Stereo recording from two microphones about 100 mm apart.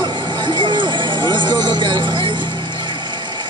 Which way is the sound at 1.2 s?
50° right (ahead or behind).